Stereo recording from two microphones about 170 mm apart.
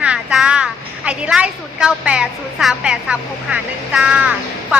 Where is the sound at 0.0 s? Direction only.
5° right (ahead or behind).